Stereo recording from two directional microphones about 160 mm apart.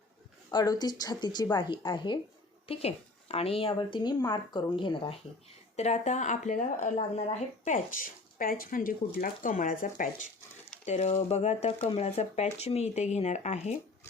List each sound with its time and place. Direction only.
0.5 s a woman's voice: 25° left (ahead or behind)
5.7 s speech: 45° left (ahead or behind)
10.8 s speech: 45° left (ahead or behind)